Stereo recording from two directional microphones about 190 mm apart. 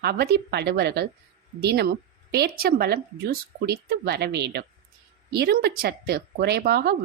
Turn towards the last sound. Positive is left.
turn(degrees=-55)  # may be behind; listen again after turning